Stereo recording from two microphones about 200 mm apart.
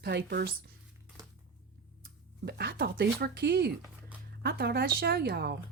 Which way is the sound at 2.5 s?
50° right (ahead or behind).